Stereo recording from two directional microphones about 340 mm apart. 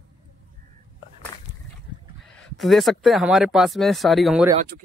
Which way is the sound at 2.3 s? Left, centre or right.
Centre.